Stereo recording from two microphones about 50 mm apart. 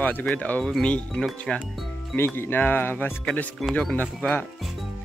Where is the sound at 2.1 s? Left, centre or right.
Left.